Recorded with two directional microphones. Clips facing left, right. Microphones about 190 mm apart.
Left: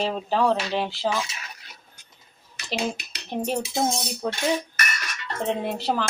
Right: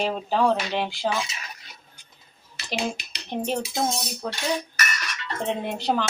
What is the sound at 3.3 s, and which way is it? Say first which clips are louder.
Speech: even; 5° left (ahead or behind).